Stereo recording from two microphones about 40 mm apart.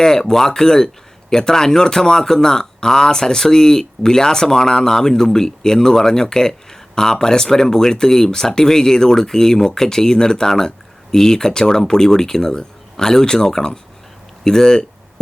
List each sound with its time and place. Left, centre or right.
0.0 s speech: centre